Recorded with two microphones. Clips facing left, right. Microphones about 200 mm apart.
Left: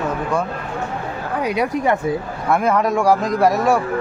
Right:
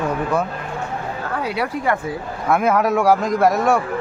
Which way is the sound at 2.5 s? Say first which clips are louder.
Even; 5° right (ahead or behind).